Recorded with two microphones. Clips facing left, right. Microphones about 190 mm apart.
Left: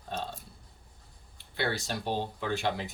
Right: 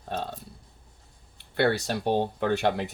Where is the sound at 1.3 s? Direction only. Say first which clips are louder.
Right 8 dB; 60° right (ahead or behind).